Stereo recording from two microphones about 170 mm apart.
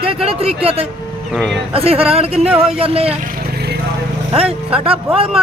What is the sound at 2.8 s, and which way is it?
Speech, 35° right (ahead or behind).